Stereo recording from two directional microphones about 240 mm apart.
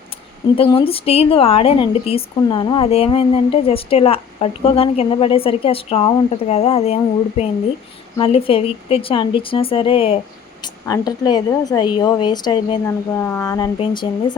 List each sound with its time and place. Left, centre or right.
0.5 s a woman's voice: left